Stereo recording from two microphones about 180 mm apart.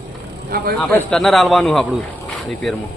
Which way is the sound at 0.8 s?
5° left (ahead or behind).